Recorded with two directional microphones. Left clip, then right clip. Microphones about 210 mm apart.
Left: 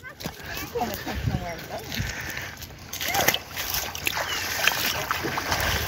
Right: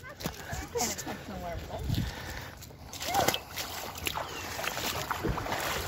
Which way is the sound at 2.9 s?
15° right (ahead or behind).